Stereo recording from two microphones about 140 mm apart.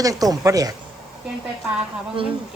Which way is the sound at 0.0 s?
25° right (ahead or behind).